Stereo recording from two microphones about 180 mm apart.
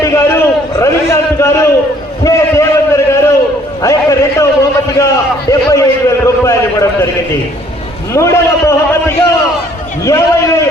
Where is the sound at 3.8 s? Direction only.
15° left (ahead or behind).